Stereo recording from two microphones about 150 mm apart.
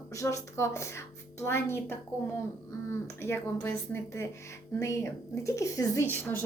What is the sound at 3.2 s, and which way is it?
A woman's voice, 15° left (ahead or behind).